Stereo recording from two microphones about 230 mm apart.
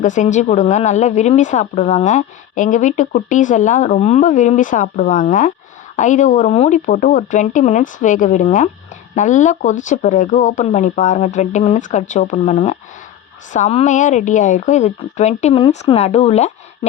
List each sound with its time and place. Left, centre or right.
0.0 s a woman's voice: left